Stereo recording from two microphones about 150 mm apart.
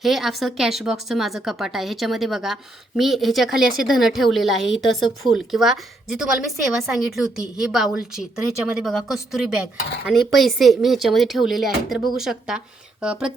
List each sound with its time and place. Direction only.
0.0 s speech: centre (ahead or behind)